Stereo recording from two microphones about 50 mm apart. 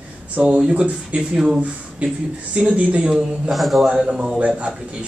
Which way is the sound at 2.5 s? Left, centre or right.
Right.